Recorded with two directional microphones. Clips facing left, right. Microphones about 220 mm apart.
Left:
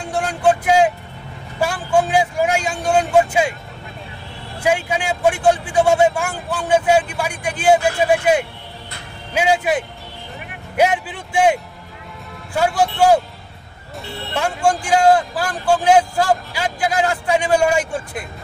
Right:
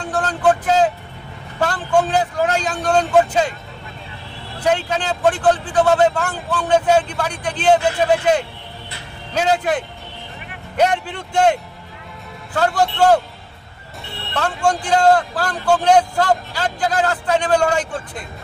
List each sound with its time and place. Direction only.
0.0 s vehicle: 10° left (ahead or behind)
1.6 s a man's voice: 10° left (ahead or behind)
4.6 s a man's voice: 10° left (ahead or behind)
12.5 s a man's voice: 10° left (ahead or behind)
14.3 s a man's voice: 10° left (ahead or behind)